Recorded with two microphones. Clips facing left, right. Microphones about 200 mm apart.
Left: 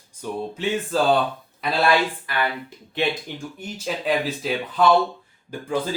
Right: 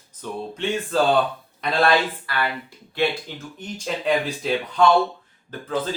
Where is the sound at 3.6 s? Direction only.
10° left (ahead or behind).